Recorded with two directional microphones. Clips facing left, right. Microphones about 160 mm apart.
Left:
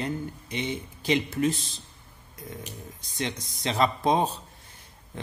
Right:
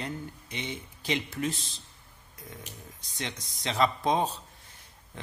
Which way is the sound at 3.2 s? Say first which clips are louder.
Left 6 dB; 45° left (ahead or behind).